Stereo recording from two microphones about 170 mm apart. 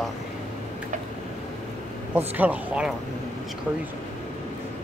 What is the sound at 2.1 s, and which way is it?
Speech, 10° right (ahead or behind).